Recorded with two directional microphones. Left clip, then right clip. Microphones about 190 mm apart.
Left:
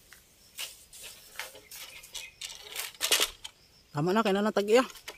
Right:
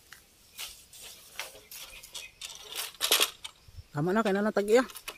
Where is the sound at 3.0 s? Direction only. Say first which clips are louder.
Right 1 dB; 25° right (ahead or behind).